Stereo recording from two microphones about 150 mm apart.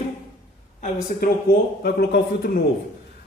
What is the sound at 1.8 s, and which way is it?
Speech, 90° left.